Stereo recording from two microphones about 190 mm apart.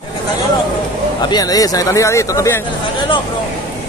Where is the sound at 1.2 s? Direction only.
20° left (ahead or behind).